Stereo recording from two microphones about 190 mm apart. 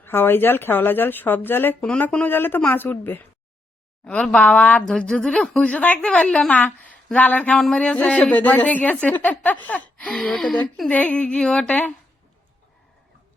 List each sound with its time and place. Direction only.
0.0 s a woman's voice: 10° left (ahead or behind)